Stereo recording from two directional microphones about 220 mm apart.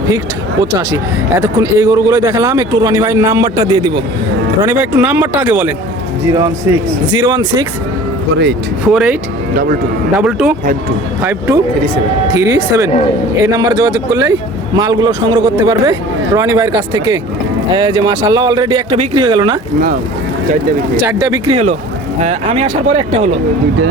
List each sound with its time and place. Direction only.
1.4 s a man's voice: 15° right (ahead or behind)
8.9 s speech: 5° right (ahead or behind)
10.2 s a man's voice: 5° right (ahead or behind); by 19.5 s 20° right (ahead or behind)
21.0 s a man's voice: 15° right (ahead or behind)